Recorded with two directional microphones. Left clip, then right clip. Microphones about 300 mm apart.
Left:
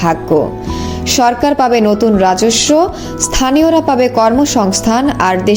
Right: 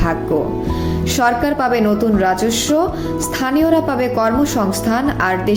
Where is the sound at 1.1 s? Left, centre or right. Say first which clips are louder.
Left 5 dB; centre.